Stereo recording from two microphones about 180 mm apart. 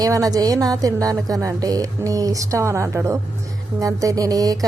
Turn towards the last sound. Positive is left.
turn(degrees=-20)  # may be behind; listen again after turning